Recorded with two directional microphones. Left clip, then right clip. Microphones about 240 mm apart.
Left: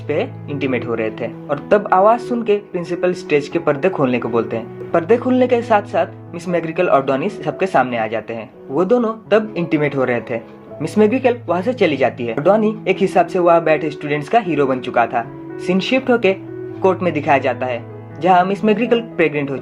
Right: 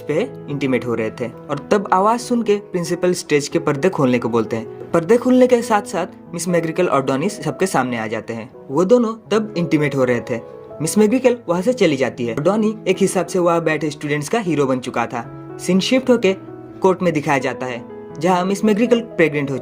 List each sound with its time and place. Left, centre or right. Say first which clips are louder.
0.1 s speech: even; right